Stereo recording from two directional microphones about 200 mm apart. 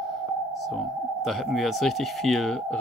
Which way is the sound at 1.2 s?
Centre (ahead or behind).